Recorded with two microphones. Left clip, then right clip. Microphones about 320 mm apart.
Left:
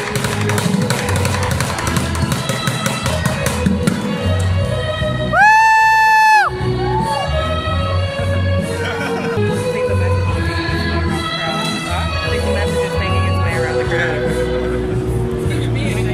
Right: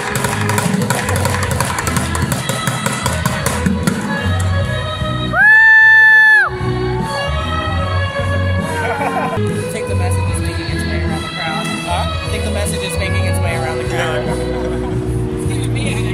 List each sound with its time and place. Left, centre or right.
5.3 s music: centre